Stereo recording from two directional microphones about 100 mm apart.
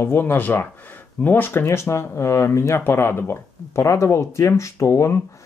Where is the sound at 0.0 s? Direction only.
20° left (ahead or behind).